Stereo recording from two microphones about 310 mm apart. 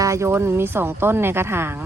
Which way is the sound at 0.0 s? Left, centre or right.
Centre.